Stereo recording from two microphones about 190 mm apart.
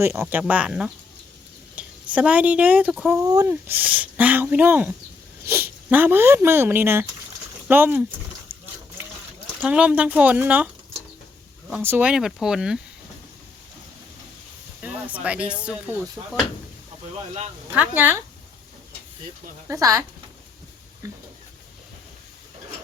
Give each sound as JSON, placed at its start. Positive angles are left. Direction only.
{"t": 0.0, "sound": "speech", "side_deg": -10}
{"t": 9.6, "sound": "speech", "side_deg": -5}
{"t": 11.7, "sound": "speech", "side_deg": -10}
{"t": 14.8, "sound": "speech", "side_deg": -5}
{"t": 17.7, "sound": "speech", "side_deg": -10}
{"t": 19.6, "sound": "speech", "side_deg": -15}